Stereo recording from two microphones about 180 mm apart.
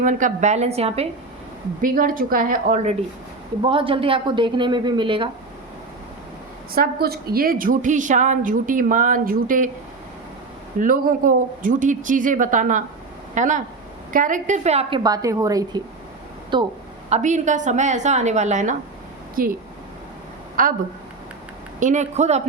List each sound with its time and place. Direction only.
0.0 s a woman's voice: 45° right (ahead or behind)
1.8 s a woman's voice: 50° right (ahead or behind)
3.6 s a woman's voice: 30° right (ahead or behind)
6.7 s a woman's voice: 55° right (ahead or behind)
10.8 s a woman's voice: 50° right (ahead or behind); by 16.7 s 25° right (ahead or behind)
17.1 s a woman's voice: 40° right (ahead or behind)
20.6 s a woman's voice: 50° right (ahead or behind)
21.8 s a woman's voice: 40° right (ahead or behind)